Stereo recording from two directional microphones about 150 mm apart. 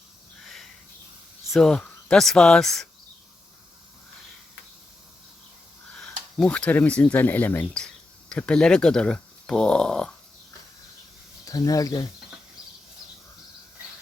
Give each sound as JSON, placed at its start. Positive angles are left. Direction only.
{"t": 0.4, "sound": "sniff", "side_deg": 0}
{"t": 1.5, "sound": "speech", "side_deg": 0}
{"t": 6.0, "sound": "speech", "side_deg": 5}
{"t": 11.4, "sound": "speech", "side_deg": 25}